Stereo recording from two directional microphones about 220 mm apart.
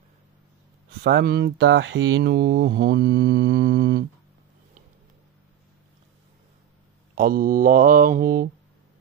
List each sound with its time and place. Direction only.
1.0 s mantra: 45° right (ahead or behind)
7.2 s mantra: 40° right (ahead or behind)